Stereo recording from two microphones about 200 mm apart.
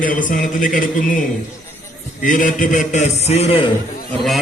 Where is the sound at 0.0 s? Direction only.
40° left (ahead or behind).